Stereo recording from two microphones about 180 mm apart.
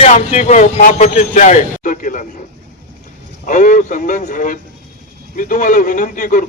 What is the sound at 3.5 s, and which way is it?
A man's voice, 45° left (ahead or behind).